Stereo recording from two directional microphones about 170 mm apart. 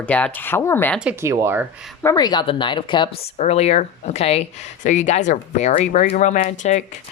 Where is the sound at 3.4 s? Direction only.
40° left (ahead or behind).